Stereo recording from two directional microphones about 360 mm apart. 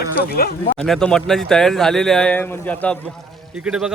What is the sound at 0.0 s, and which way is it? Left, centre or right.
Speech, left.